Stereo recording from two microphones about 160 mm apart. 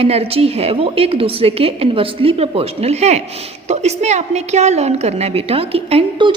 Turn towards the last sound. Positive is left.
turn(degrees=-35)  # may be behind; listen again after turning